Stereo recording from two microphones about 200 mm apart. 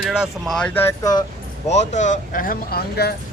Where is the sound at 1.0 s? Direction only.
20° left (ahead or behind).